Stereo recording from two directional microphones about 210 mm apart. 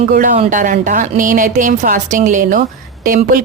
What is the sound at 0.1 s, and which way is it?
Speech, 40° right (ahead or behind).